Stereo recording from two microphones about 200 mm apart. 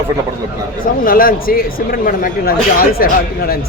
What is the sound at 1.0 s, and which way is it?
Speech, 45° left (ahead or behind).